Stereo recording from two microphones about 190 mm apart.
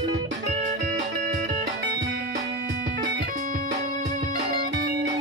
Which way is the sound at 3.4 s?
40° right (ahead or behind).